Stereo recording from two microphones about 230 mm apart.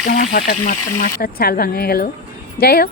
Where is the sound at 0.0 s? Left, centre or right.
Left.